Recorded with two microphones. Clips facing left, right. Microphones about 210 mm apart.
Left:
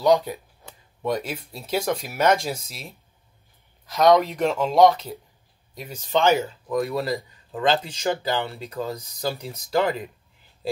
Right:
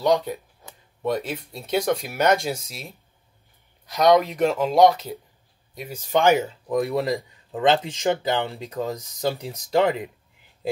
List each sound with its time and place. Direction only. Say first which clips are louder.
0.0 s speech: left 2 dB; centre (ahead or behind); by 10.0 s 20° right (ahead or behind)